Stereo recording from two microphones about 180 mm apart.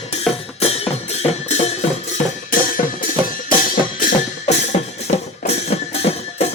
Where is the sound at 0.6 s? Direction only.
35° left (ahead or behind).